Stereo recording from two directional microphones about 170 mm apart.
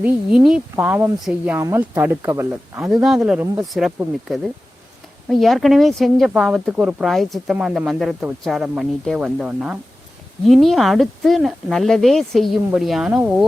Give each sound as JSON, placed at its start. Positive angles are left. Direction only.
{"t": 0.0, "sound": "speech", "side_deg": -5}
{"t": 3.4, "sound": "speech", "side_deg": -20}
{"t": 3.7, "sound": "speech", "side_deg": 0}